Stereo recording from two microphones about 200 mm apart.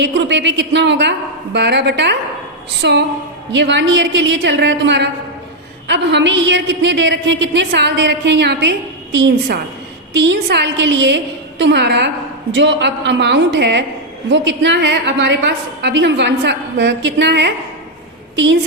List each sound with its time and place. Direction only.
0.0 s a woman's voice: 60° right (ahead or behind)